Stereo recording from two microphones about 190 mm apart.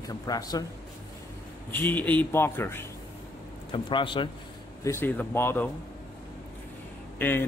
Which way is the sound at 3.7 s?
25° left (ahead or behind).